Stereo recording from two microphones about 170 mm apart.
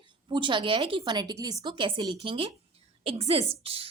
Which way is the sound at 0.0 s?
30° right (ahead or behind).